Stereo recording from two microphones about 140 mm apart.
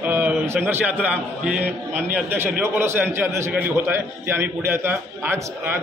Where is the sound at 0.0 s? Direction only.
10° right (ahead or behind).